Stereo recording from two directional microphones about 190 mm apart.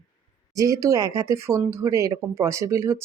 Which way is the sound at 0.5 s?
15° right (ahead or behind).